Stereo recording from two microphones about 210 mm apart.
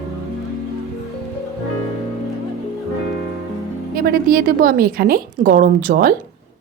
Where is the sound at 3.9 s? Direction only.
45° right (ahead or behind).